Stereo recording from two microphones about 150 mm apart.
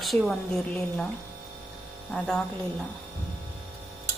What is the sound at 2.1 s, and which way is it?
Speech, 5° left (ahead or behind).